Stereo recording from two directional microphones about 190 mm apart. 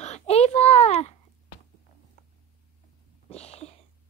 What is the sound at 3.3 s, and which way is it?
Sneeze, 35° left (ahead or behind).